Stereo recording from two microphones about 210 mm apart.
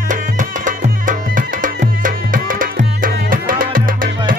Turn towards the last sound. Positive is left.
turn(degrees=-40)  # may be behind; listen again after turning